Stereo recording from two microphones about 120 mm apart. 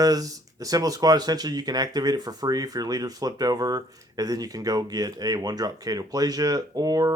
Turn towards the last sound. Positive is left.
turn(degrees=-30)  # may be behind; listen again after turning